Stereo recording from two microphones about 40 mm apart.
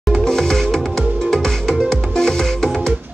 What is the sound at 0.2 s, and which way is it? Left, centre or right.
Music, centre.